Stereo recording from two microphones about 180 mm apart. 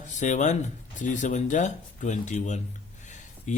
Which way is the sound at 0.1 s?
40° left (ahead or behind).